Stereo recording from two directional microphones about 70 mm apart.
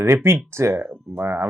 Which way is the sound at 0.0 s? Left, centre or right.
Right.